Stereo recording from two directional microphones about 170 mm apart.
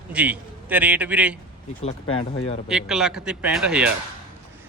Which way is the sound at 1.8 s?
30° left (ahead or behind).